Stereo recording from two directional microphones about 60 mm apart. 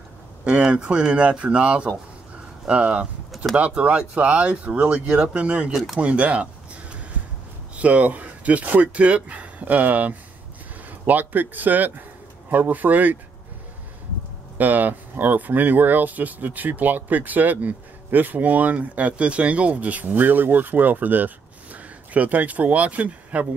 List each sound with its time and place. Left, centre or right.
0.5 s speech: centre
5.9 s a sound: right
7.7 s speech: right
14.6 s speech: right